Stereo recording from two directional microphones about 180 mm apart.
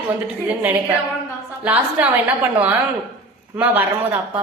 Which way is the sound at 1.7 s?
10° right (ahead or behind).